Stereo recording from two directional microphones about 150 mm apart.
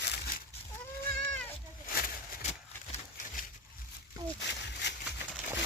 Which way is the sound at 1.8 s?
80° left.